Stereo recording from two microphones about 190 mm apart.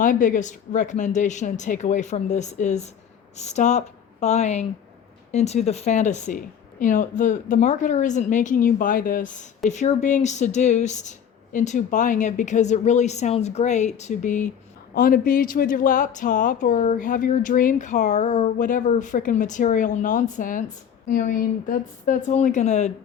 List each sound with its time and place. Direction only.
0.0 s speech: 45° left (ahead or behind)